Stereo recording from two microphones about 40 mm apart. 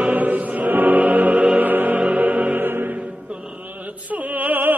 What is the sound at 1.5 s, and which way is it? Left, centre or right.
Music, right.